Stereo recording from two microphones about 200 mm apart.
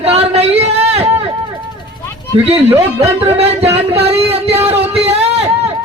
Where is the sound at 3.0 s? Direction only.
30° right (ahead or behind).